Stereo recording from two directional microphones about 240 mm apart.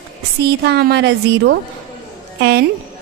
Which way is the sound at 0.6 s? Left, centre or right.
Right.